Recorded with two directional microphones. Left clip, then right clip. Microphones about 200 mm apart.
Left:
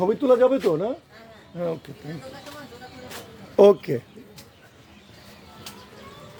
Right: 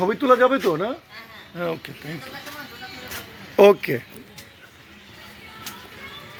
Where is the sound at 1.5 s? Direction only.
10° left (ahead or behind).